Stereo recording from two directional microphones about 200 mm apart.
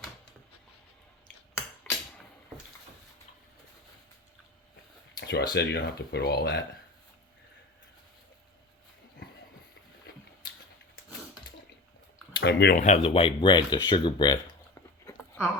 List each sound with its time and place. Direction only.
1.9 s hammer: 5° left (ahead or behind)
5.1 s speech: 55° left (ahead or behind)
12.4 s speech: 55° left (ahead or behind)
12.7 s speech: 35° left (ahead or behind)